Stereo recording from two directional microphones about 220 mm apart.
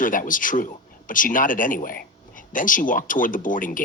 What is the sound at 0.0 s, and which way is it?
Speech, 35° left (ahead or behind).